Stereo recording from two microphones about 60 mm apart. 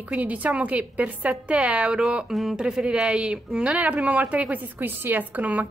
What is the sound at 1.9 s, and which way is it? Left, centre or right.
A woman's voice, centre.